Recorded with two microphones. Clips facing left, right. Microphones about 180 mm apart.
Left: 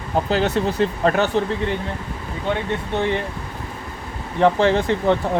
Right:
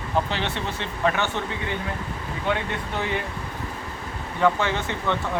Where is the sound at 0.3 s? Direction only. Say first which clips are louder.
Left 9 dB; 40° left (ahead or behind).